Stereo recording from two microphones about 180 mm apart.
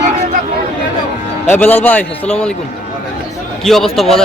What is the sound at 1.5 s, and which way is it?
A man's voice, 10° left (ahead or behind).